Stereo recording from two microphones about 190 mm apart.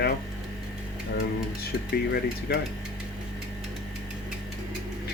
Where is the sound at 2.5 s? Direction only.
60° left (ahead or behind).